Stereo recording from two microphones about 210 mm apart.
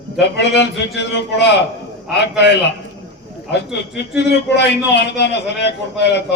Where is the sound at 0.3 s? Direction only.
55° left (ahead or behind).